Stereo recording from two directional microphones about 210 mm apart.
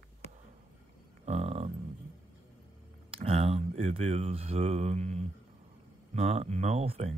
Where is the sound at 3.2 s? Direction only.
30° right (ahead or behind).